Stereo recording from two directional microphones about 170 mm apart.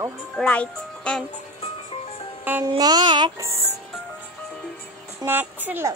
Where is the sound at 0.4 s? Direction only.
5° left (ahead or behind).